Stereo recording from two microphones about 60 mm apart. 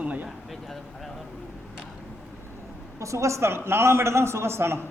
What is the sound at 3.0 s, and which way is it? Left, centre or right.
A man's voice, right.